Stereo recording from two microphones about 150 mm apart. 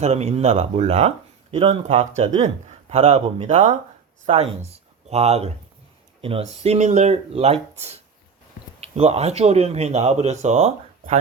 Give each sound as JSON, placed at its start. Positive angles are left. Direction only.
{"t": 0.0, "sound": "speech", "side_deg": -45}